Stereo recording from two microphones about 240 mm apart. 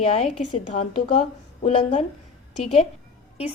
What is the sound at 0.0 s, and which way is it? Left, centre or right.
Speech, left.